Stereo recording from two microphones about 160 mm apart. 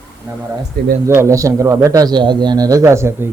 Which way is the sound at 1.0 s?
15° right (ahead or behind).